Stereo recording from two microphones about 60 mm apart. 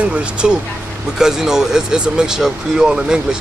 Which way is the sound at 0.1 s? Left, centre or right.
Centre.